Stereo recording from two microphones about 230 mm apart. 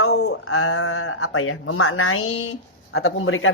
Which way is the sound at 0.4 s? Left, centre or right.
Left.